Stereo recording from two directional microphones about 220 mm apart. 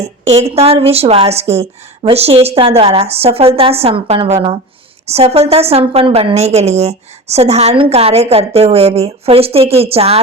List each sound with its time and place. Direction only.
0.0 s a woman's voice: 30° right (ahead or behind)